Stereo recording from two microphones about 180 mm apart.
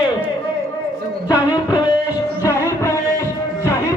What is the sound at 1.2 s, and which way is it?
Music, 20° left (ahead or behind).